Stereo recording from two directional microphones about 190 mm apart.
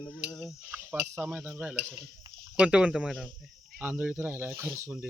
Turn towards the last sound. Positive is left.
turn(degrees=-10)  # may be behind; listen again after turning